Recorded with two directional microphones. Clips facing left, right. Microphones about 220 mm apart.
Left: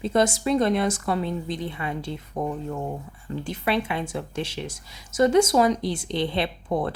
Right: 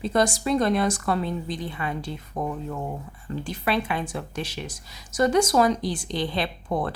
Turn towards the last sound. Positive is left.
turn(degrees=20)  # may be behind; listen again after turning